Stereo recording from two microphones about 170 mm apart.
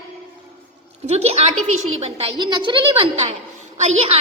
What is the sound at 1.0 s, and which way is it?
A woman's voice, 40° right (ahead or behind).